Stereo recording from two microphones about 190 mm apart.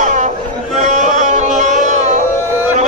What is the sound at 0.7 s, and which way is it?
Music, 40° right (ahead or behind).